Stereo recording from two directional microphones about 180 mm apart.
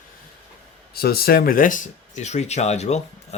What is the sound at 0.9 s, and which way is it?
Speech, 55° left (ahead or behind).